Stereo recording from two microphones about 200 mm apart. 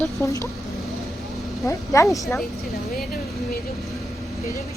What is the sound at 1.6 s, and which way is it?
Speech, 15° left (ahead or behind).